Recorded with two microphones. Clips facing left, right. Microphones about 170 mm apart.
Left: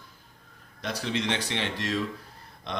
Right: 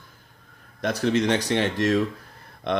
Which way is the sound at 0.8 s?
50° right (ahead or behind).